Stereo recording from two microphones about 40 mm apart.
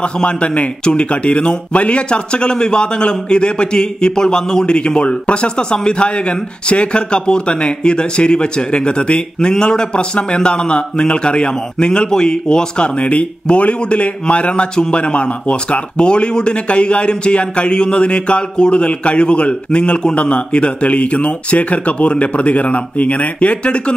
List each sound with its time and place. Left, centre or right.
0.0 s a man's voice: left